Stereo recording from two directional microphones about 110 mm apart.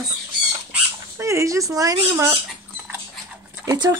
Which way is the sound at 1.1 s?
25° right (ahead or behind).